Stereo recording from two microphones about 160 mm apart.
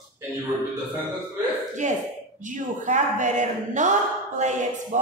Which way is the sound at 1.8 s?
50° right (ahead or behind).